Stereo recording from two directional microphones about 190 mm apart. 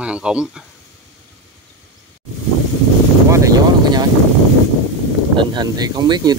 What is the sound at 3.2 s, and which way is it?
Vehicle, 15° right (ahead or behind).